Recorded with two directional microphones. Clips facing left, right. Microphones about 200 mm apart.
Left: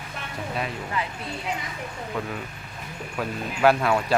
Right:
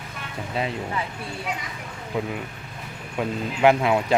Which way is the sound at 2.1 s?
15° right (ahead or behind).